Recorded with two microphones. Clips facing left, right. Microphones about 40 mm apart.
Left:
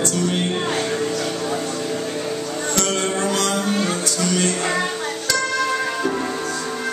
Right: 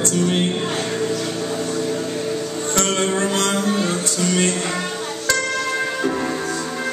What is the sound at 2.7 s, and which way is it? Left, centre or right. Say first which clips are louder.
Music: right 2 dB; right.